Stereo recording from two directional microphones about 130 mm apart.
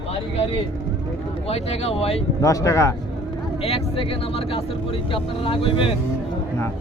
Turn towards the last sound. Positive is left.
turn(degrees=45)  # may be behind; listen again after turning